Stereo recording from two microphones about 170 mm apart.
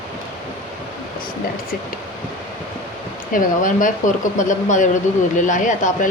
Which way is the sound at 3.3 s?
55° left (ahead or behind).